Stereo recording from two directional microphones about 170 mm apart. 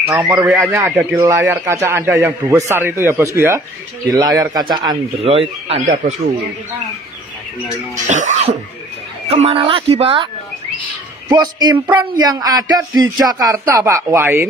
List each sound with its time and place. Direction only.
0.0 s a man's voice: 5° right (ahead or behind)
0.3 s a man's voice: 20° right (ahead or behind); by 6.3 s 45° right (ahead or behind)
8.1 s a man's voice: 40° right (ahead or behind); by 14.5 s 15° right (ahead or behind)